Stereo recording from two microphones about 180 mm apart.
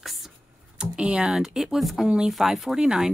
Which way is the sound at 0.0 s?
Centre (ahead or behind).